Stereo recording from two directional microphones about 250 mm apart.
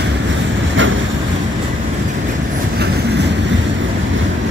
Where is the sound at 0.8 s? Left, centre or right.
Right.